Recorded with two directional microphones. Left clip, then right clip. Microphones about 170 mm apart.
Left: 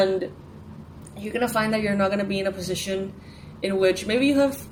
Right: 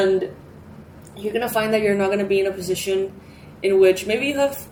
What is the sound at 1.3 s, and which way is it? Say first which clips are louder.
A woman's voice: right 3 dB; 55° left (ahead or behind).